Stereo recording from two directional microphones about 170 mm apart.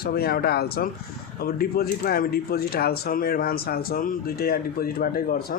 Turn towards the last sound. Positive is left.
turn(degrees=60)  # may be behind; listen again after turning